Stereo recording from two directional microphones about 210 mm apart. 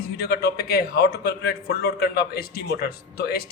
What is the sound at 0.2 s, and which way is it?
A man's voice, 50° left (ahead or behind).